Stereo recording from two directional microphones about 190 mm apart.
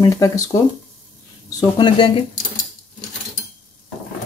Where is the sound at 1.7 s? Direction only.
25° left (ahead or behind).